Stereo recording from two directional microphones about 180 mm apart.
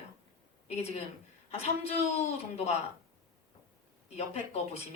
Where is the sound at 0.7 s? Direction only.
35° left (ahead or behind).